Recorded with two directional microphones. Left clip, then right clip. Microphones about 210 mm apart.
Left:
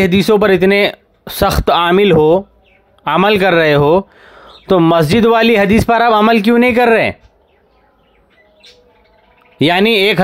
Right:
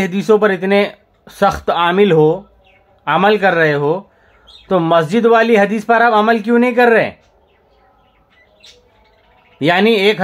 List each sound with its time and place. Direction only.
0.0 s speech: 35° left (ahead or behind)
9.6 s speech: 45° left (ahead or behind)